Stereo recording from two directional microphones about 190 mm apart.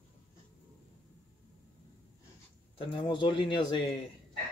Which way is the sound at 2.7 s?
25° left (ahead or behind).